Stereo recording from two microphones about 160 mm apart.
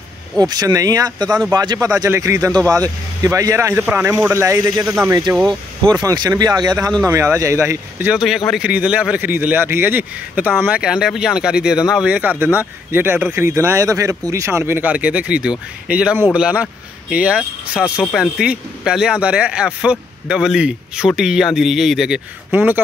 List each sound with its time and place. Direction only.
0.4 s speech: 25° right (ahead or behind)
4.8 s speech: 5° right (ahead or behind)
6.0 s speech: 25° right (ahead or behind)